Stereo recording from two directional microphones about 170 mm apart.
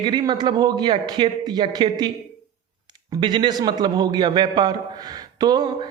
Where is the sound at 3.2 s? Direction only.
25° right (ahead or behind).